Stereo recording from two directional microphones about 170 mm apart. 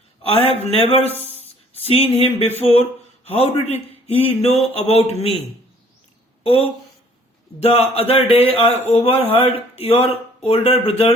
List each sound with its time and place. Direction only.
0.2 s speech: 35° left (ahead or behind)
1.4 s a sound: 35° left (ahead or behind)
3.2 s speech: 35° left (ahead or behind)
6.4 s speech: 35° left (ahead or behind)